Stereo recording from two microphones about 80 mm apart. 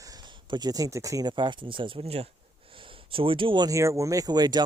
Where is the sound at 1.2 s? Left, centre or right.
Right.